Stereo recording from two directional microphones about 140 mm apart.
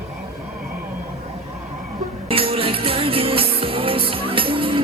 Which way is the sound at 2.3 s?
40° right (ahead or behind).